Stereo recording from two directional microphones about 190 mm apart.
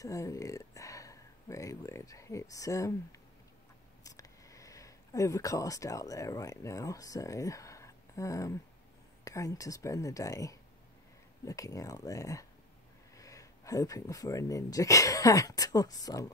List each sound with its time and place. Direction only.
0.0 s speech: 15° left (ahead or behind)